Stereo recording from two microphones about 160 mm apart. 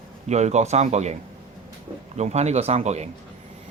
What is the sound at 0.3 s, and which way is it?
Speech, 45° right (ahead or behind).